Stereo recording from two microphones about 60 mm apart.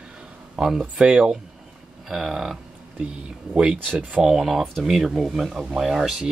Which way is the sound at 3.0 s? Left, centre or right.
Centre.